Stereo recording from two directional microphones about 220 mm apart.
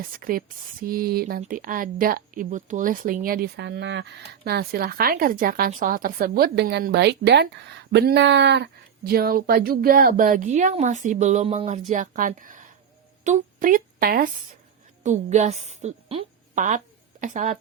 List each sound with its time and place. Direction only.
0.2 s a woman's voice: 40° right (ahead or behind)